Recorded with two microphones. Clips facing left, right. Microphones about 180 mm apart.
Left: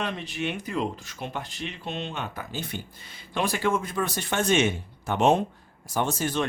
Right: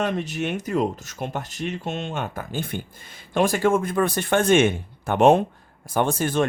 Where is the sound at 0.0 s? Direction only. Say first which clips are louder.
Right 5 dB; 45° right (ahead or behind).